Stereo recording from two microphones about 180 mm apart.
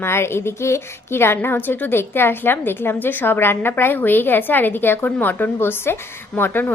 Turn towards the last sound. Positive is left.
turn(degrees=10)  # may be behind; listen again after turning